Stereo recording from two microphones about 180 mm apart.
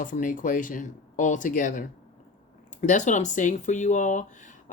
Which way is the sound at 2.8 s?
45° left (ahead or behind).